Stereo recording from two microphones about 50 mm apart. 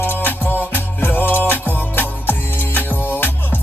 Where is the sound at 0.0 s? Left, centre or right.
Left.